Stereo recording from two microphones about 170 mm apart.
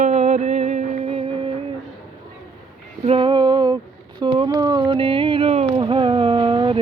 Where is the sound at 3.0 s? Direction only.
30° right (ahead or behind).